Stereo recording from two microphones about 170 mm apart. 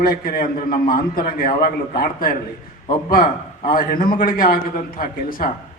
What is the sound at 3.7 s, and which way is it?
A man's voice, 55° left (ahead or behind).